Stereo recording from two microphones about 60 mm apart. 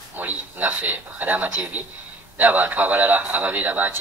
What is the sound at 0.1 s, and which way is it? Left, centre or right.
A man's voice, right.